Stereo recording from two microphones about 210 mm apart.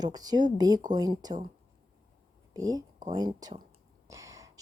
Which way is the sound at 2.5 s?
15° right (ahead or behind).